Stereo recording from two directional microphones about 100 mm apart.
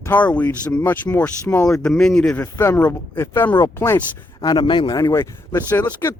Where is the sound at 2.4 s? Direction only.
25° left (ahead or behind).